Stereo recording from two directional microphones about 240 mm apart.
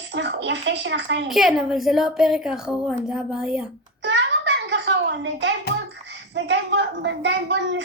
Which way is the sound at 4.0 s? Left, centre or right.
Right.